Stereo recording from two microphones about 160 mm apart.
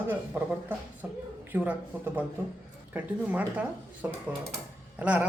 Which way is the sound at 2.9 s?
10° right (ahead or behind).